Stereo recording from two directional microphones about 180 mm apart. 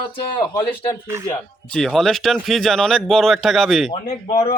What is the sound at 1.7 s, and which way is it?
Speech, centre (ahead or behind).